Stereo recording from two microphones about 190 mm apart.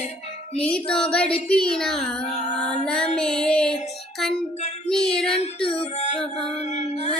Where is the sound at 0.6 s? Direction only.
5° left (ahead or behind).